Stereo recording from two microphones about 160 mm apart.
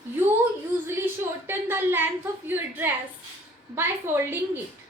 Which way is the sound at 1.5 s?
15° right (ahead or behind).